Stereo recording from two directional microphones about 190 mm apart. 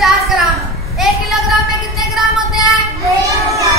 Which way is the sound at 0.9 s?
Centre (ahead or behind).